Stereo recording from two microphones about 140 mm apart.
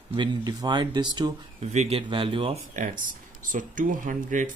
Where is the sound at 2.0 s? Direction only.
35° right (ahead or behind).